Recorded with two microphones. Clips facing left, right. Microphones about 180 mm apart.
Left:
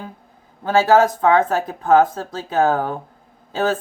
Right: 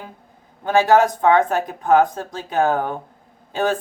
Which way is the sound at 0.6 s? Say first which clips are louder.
Left 1 dB; 15° right (ahead or behind).